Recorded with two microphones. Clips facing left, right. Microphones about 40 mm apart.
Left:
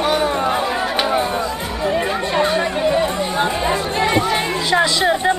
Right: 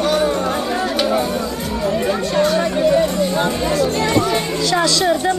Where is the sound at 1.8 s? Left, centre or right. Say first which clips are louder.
Even; centre.